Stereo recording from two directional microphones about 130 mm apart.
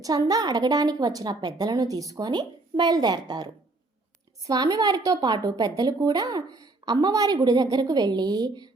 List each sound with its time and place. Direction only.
0.0 s a woman's voice: 30° right (ahead or behind)